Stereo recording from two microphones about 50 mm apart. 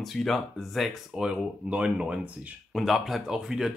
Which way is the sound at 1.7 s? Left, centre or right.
Centre.